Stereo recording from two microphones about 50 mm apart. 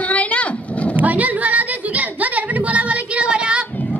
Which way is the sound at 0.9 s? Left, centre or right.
Right.